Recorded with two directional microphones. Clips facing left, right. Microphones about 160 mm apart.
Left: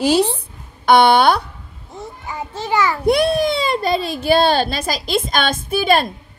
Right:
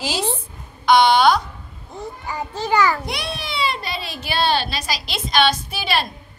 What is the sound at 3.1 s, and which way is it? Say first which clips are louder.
A child's voice: left 14 dB; 55° left (ahead or behind).